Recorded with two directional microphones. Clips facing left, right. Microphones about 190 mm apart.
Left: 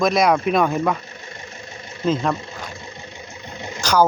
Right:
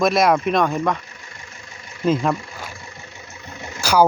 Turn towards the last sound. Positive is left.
turn(degrees=-10)  # may be behind; listen again after turning